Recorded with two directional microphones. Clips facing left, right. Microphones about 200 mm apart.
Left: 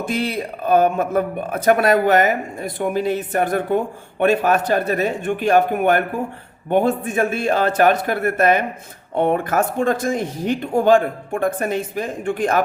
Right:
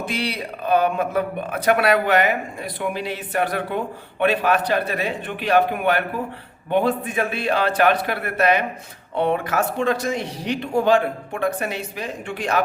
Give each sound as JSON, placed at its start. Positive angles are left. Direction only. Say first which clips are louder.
{"t": 0.0, "sound": "speech", "louder": "left 4 dB", "side_deg": 45}